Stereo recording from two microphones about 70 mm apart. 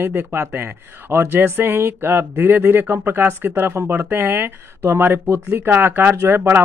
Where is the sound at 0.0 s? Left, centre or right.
Right.